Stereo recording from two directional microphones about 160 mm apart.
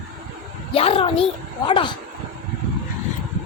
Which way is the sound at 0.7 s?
35° left (ahead or behind).